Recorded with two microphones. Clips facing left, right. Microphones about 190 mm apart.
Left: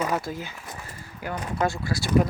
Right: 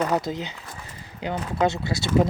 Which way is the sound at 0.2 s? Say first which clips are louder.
Right 3 dB; 20° right (ahead or behind).